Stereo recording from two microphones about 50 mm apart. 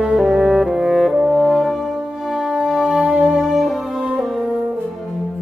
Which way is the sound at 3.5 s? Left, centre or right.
Centre.